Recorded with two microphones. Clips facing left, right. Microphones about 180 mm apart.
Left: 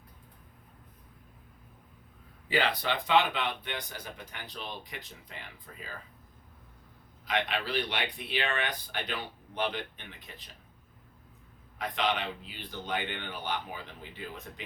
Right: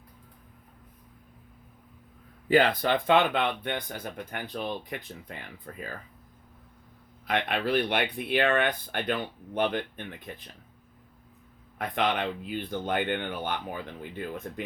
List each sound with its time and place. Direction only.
2.5 s speech: 50° right (ahead or behind)
7.3 s speech: 55° right (ahead or behind)
11.8 s speech: 55° right (ahead or behind)